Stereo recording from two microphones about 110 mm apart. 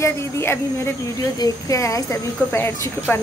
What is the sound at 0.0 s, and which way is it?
A woman's voice, 20° left (ahead or behind).